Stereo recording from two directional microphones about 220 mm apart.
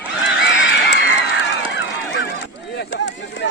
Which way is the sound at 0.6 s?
55° left (ahead or behind).